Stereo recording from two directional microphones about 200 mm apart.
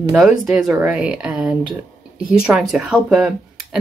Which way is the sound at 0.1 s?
Centre (ahead or behind).